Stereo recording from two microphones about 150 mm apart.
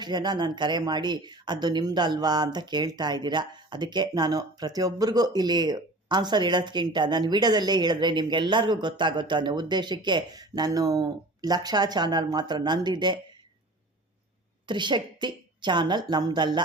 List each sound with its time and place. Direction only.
0.0 s speech: 30° right (ahead or behind)
14.7 s speech: 30° right (ahead or behind)